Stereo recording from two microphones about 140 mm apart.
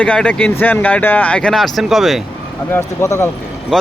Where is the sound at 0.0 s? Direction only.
10° left (ahead or behind).